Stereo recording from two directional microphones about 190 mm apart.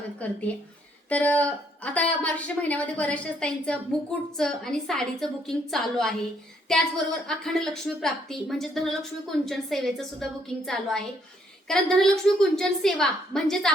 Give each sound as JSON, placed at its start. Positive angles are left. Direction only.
{"t": 0.2, "sound": "a woman's voice", "side_deg": 5}
{"t": 11.7, "sound": "a woman's voice", "side_deg": 0}